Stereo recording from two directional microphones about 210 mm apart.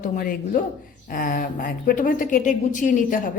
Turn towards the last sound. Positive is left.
turn(degrees=40)  # may be behind; listen again after turning